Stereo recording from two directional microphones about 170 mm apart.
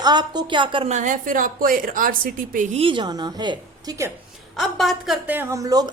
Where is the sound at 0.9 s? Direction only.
45° right (ahead or behind).